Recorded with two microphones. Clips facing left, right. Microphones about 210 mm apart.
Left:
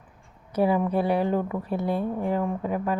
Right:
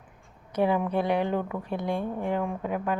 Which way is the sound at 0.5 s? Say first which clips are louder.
Left 2 dB; 5° left (ahead or behind).